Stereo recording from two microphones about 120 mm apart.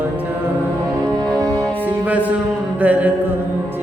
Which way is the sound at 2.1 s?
15° right (ahead or behind).